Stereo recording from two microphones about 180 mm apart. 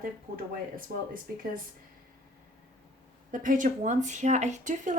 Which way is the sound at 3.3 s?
45° right (ahead or behind).